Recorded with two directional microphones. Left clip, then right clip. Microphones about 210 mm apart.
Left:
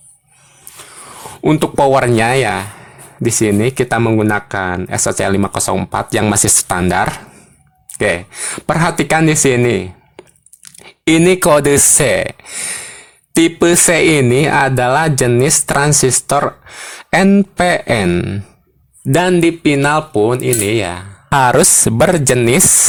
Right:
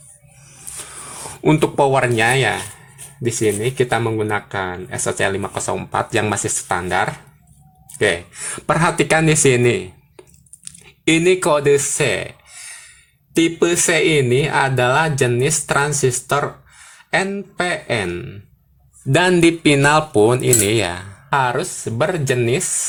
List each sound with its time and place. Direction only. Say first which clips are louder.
0.8 s speech: left 2 dB; 15° left (ahead or behind); by 7.1 s 50° left (ahead or behind)
7.9 s speech: left 2 dB; 40° left (ahead or behind); by 18.3 s 55° left (ahead or behind)
19.3 s speech: left 1 dB; 20° left (ahead or behind)
21.2 s speech: left 8 dB; 50° left (ahead or behind)